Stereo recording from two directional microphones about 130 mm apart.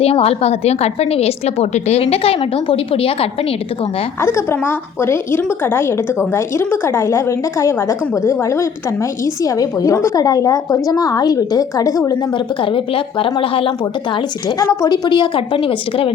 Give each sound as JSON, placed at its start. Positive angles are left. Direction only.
{"t": 0.0, "sound": "speech", "side_deg": 50}
{"t": 4.2, "sound": "a woman's voice", "side_deg": 20}
{"t": 12.7, "sound": "speech", "side_deg": 40}
{"t": 14.6, "sound": "a woman's voice", "side_deg": 25}